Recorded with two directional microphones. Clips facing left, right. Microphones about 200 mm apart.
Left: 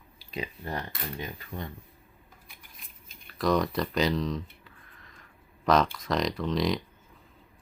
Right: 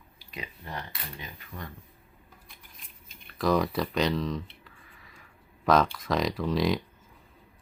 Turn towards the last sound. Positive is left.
turn(degrees=0)  # may be behind; listen again after turning